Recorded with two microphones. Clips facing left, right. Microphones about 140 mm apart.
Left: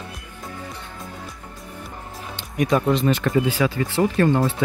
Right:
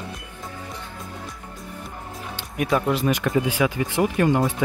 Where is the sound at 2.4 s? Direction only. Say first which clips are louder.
Left 2 dB; 5° right (ahead or behind).